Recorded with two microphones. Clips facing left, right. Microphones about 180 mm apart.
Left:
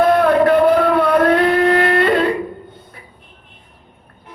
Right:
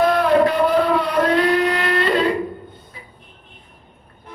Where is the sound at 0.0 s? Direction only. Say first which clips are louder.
Left 3 dB; 55° left (ahead or behind).